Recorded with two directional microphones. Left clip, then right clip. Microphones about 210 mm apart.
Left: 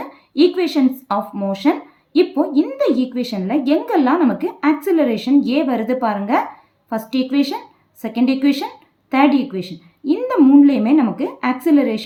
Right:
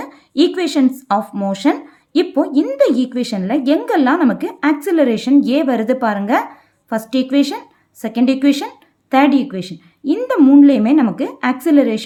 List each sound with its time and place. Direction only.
0.0 s a woman's voice: 40° right (ahead or behind)